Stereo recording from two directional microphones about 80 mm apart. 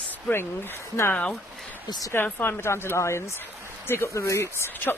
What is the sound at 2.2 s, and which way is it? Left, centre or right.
Speech, left.